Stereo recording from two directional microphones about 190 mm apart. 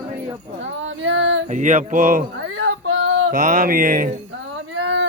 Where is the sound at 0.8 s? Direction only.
85° right.